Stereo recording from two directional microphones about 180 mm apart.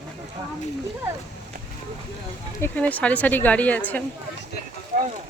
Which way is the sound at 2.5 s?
10° left (ahead or behind).